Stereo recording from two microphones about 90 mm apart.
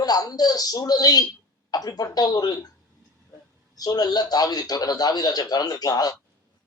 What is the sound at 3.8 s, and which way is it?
Speech, 45° left (ahead or behind).